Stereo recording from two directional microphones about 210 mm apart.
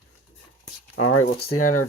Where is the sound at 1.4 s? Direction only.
90° left.